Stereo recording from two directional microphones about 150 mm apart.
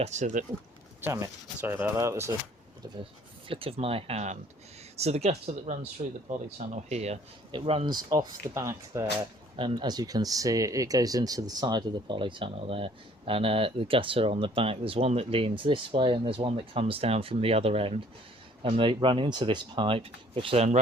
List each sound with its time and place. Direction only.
0.0 s speech: 50° right (ahead or behind)
1.6 s speech: 15° right (ahead or behind)
3.5 s speech: 40° right (ahead or behind)
7.9 s speech: 25° right (ahead or behind)
9.6 s speech: 35° right (ahead or behind)